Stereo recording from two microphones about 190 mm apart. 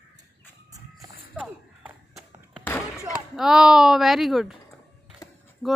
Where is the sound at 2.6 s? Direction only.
10° left (ahead or behind).